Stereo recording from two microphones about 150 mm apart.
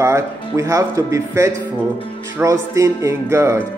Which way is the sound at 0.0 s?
20° right (ahead or behind).